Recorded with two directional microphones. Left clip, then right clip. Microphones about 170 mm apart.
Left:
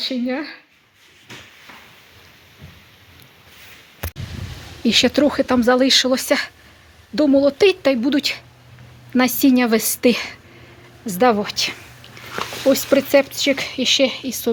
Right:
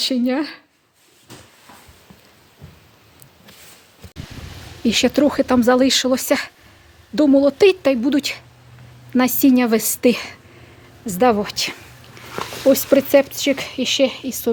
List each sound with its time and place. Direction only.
0.0 s speech: 40° right (ahead or behind)
4.8 s a woman's voice: 15° right (ahead or behind)